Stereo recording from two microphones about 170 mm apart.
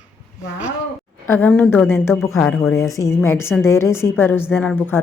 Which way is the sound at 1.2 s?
10° left (ahead or behind).